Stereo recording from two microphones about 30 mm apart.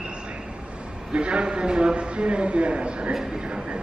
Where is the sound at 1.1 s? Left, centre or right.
Right.